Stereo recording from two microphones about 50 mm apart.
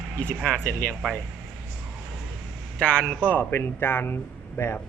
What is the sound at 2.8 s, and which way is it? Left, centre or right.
Speech, left.